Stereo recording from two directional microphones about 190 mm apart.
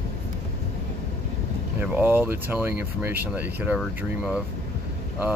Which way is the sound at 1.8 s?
10° right (ahead or behind).